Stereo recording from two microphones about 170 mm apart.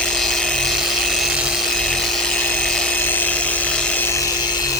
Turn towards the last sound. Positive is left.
turn(degrees=25)  # may be behind; listen again after turning